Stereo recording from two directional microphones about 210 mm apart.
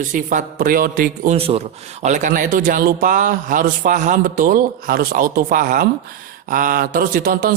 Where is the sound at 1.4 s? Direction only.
30° right (ahead or behind).